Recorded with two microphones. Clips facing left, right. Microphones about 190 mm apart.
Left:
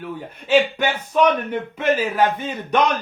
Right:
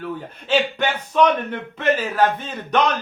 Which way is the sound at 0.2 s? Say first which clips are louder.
Left 5 dB; 10° left (ahead or behind).